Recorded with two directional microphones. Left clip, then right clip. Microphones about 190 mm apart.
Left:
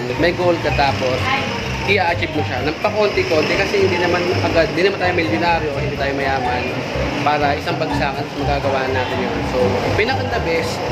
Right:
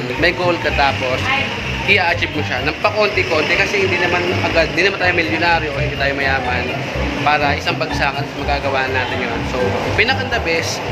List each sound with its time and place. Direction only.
1.9 s speech: 5° left (ahead or behind)
4.6 s speech: 5° left (ahead or behind)
8.0 s speech: 5° left (ahead or behind)
9.9 s speech: 5° left (ahead or behind)